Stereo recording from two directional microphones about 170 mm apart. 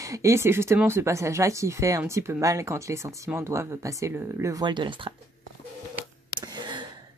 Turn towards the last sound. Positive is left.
turn(degrees=-25)  # may be behind; listen again after turning